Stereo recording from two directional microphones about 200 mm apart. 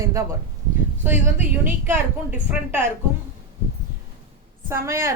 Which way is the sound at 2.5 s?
10° right (ahead or behind).